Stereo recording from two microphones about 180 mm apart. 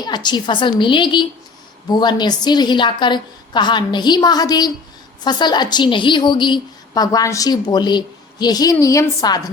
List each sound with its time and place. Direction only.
0.0 s a woman's voice: 25° left (ahead or behind)